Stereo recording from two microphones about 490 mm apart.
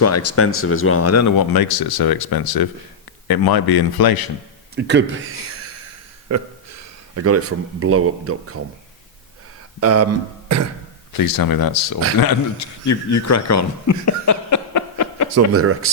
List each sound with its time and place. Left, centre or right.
0.0 s speech: left
4.7 s a man's voice: right
6.2 s speech: right
9.8 s a man's voice: right
10.5 s beatboxing: right
11.2 s a man's voice: left
15.5 s a man's voice: right